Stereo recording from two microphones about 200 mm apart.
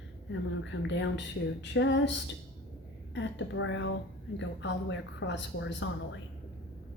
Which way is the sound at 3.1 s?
65° left (ahead or behind).